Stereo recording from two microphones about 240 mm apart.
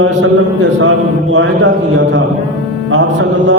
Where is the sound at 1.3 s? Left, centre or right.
Right.